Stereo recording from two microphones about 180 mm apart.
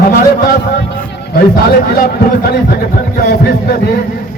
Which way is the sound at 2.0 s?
60° left (ahead or behind).